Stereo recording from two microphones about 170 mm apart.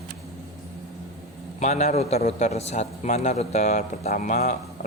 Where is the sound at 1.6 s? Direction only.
45° left (ahead or behind).